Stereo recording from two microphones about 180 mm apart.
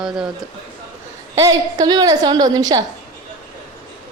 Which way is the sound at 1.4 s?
20° right (ahead or behind).